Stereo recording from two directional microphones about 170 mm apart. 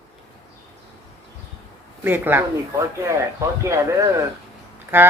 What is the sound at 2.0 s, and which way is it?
Speech, 10° right (ahead or behind).